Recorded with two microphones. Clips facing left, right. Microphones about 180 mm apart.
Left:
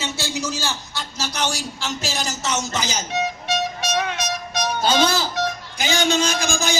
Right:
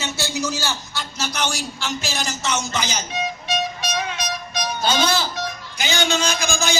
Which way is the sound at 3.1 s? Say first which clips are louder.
Left 2 dB; 65° left (ahead or behind).